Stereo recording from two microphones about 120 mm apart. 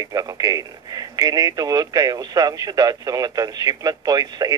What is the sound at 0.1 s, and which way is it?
Speech, 30° right (ahead or behind).